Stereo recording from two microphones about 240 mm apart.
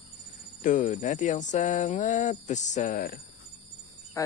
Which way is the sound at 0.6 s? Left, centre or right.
Left.